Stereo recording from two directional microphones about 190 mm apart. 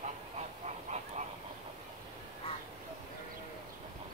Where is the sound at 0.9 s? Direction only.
35° right (ahead or behind).